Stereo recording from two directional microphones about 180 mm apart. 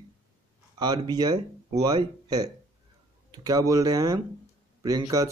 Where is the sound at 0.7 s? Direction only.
20° right (ahead or behind).